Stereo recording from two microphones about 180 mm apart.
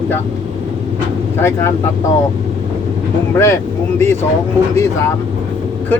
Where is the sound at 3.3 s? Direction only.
15° left (ahead or behind).